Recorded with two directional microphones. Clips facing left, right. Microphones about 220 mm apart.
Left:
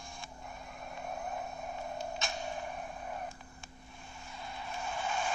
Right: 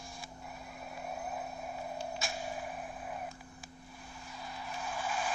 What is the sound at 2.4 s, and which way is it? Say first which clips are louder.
Whip: even; 5° right (ahead or behind).